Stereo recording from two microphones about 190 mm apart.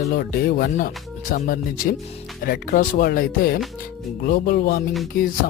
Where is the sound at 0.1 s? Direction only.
50° left (ahead or behind).